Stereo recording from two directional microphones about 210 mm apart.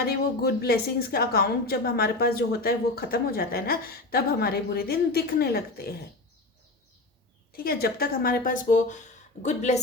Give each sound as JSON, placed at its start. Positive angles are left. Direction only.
{"t": 0.0, "sound": "a woman's voice", "side_deg": 50}
{"t": 7.5, "sound": "a woman's voice", "side_deg": 45}